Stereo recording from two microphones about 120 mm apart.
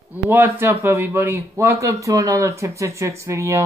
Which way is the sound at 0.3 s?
15° right (ahead or behind).